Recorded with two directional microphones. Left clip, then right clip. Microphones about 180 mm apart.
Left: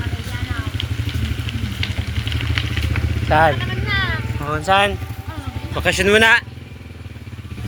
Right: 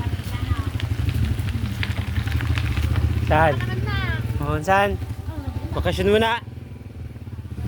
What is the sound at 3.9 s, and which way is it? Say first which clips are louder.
Vehicle: left 10 dB; 90° right.